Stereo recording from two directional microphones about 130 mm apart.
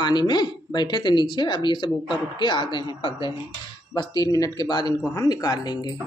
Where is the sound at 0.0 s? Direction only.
35° left (ahead or behind).